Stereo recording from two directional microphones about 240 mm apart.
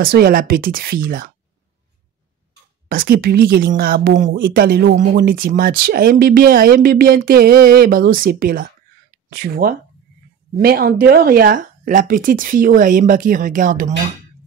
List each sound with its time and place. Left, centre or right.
0.0 s speech: right
2.9 s speech: right